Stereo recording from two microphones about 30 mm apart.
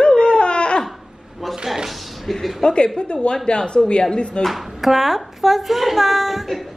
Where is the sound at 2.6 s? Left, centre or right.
Left.